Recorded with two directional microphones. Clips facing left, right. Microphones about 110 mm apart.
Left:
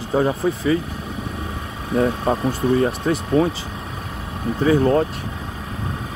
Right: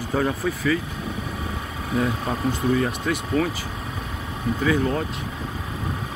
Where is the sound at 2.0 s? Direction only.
35° left (ahead or behind).